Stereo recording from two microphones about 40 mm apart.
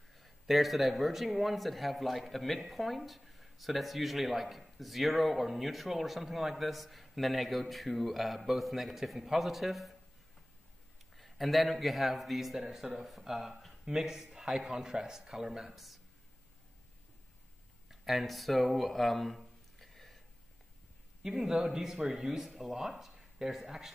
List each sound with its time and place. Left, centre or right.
0.1 s speech: centre
11.1 s a man's voice: centre
17.8 s a sound: centre
21.2 s a man's voice: centre